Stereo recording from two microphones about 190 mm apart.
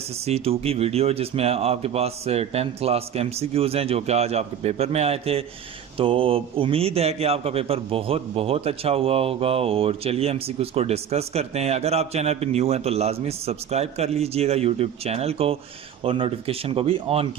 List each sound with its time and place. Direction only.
0.3 s speech: 30° right (ahead or behind)